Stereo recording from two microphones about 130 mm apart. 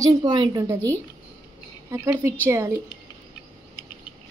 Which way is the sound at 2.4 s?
20° right (ahead or behind).